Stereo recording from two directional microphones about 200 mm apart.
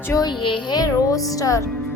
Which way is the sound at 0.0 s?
15° left (ahead or behind).